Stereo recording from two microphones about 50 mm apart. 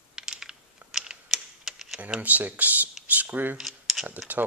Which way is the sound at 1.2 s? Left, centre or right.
Centre.